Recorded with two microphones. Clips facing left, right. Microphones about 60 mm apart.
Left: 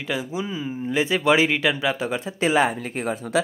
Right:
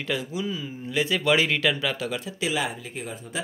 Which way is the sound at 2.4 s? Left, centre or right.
Left.